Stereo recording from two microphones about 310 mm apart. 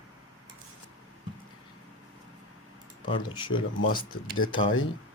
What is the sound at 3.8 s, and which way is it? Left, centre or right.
Speech, left.